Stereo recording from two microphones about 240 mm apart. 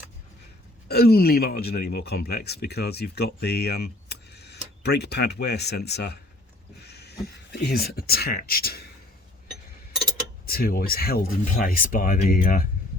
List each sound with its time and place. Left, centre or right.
0.9 s speech: left
6.7 s a sound: left
7.5 s speech: left
10.4 s speech: left